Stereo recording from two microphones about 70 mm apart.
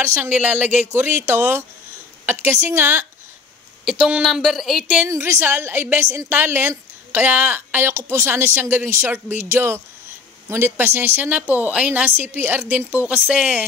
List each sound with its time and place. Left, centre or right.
0.0 s a woman's voice: right
0.3 s a woman's voice: right
0.9 s a woman's voice: right
4.2 s speech: centre
5.1 s a woman's voice: right
7.9 s a woman's voice: right
8.3 s a woman's voice: right; by 13.7 s centre